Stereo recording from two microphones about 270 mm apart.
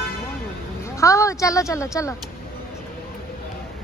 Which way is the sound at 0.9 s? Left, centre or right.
Centre.